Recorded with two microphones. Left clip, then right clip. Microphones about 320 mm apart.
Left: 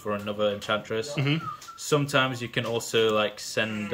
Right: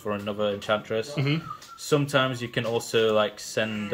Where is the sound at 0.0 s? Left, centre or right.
Centre.